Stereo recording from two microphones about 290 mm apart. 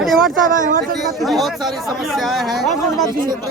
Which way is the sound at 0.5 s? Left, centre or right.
Right.